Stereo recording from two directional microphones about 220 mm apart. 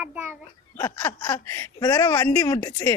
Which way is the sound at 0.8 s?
10° left (ahead or behind).